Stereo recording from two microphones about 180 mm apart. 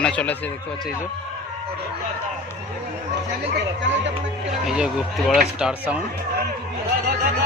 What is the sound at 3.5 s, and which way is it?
Speech, 90° right.